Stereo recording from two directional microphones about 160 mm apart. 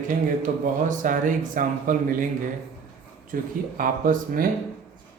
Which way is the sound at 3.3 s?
60° right (ahead or behind).